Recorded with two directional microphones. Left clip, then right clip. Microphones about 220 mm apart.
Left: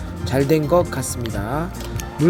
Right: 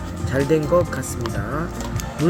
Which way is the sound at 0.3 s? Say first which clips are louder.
Left 1 dB; 20° left (ahead or behind).